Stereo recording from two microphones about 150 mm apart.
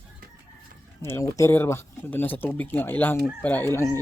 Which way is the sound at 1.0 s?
20° left (ahead or behind).